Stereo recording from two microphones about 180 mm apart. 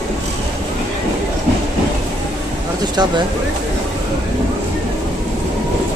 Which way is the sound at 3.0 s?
25° right (ahead or behind).